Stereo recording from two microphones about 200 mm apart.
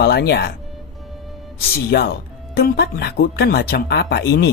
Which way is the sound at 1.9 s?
55° left (ahead or behind).